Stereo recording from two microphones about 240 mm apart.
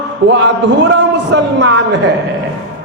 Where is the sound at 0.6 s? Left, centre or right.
Right.